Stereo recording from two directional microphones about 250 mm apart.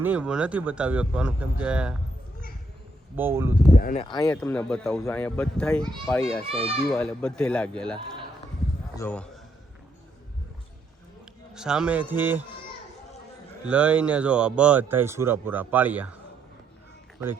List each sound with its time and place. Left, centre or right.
0.0 s speech: centre
3.2 s speech: centre
3.8 s speech: left
4.0 s speech: centre
4.3 s speech: centre
6.5 s a child's voice: right
6.8 s speech: centre
9.0 s a man's voice: centre
11.5 s speech: centre
13.7 s speech: centre